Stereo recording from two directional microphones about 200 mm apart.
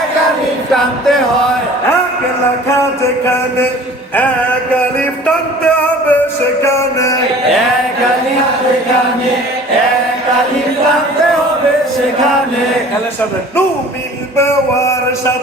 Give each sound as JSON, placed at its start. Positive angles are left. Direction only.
{"t": 0.7, "sound": "music", "side_deg": 0}
{"t": 5.2, "sound": "music", "side_deg": 5}
{"t": 14.3, "sound": "music", "side_deg": 15}